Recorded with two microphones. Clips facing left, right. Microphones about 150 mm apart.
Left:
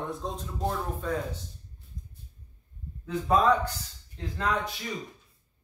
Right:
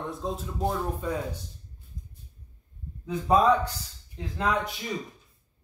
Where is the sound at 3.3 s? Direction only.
15° right (ahead or behind).